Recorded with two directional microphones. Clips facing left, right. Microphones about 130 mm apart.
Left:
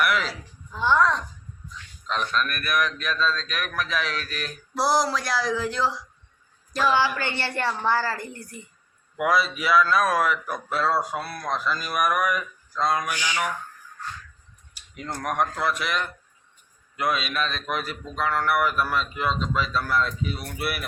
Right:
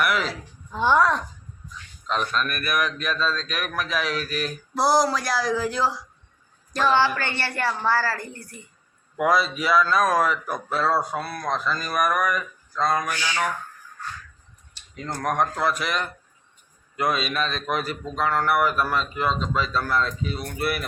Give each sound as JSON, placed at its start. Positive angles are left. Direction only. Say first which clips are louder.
{"t": 0.0, "sound": "speech", "louder": "even", "side_deg": 0}
{"t": 0.7, "sound": "speech", "louder": "right 2 dB", "side_deg": -20}
{"t": 0.9, "sound": "speech", "louder": "even", "side_deg": -5}
{"t": 6.7, "sound": "a sound", "louder": "right 2 dB", "side_deg": 5}
{"t": 7.8, "sound": "a woman's voice", "louder": "right 1 dB", "side_deg": 20}
{"t": 9.1, "sound": "speech", "louder": "right 2 dB", "side_deg": 5}
{"t": 14.8, "sound": "tick-tock", "louder": "right 2 dB", "side_deg": 10}
{"t": 15.1, "sound": "speech", "louder": "right 2 dB", "side_deg": 5}